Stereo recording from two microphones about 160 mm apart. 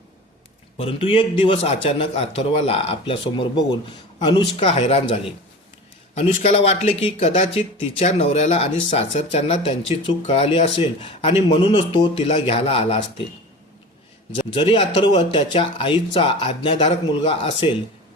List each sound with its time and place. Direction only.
0.8 s speech: 35° left (ahead or behind)
14.3 s speech: 30° left (ahead or behind)